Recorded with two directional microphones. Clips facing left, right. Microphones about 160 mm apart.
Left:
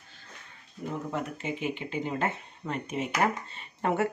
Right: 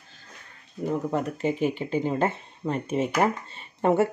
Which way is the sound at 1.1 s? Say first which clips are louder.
Right 7 dB; 40° right (ahead or behind).